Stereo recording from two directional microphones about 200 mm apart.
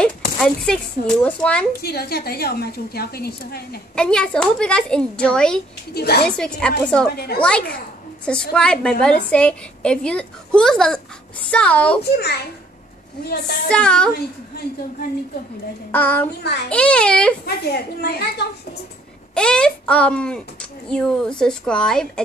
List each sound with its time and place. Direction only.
0.0 s a child's voice: 5° left (ahead or behind)
1.8 s a woman's voice: 50° left (ahead or behind)
3.9 s a woman's voice: 5° left (ahead or behind)
5.9 s a woman's voice: 50° left (ahead or behind)
6.2 s a woman's voice: 5° left (ahead or behind)
7.1 s a woman's voice: 50° left (ahead or behind)
7.3 s a woman's voice: 5° left (ahead or behind)
12.0 s a woman's voice: 55° left (ahead or behind)
13.7 s a woman's voice: 5° left (ahead or behind)
15.9 s child singing: 10° left (ahead or behind)
16.6 s a woman's voice: 5° left (ahead or behind)
17.5 s a woman's voice: 50° left (ahead or behind)
19.3 s a woman's voice: 5° left (ahead or behind)